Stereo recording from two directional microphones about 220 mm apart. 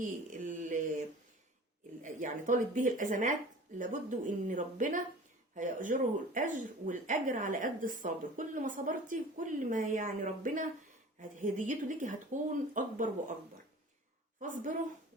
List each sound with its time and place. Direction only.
0.0 s mantra: 35° right (ahead or behind)
2.0 s speech: 35° right (ahead or behind)
14.4 s speech: 35° right (ahead or behind)